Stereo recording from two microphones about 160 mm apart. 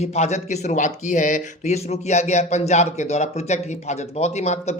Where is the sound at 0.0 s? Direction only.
45° left (ahead or behind).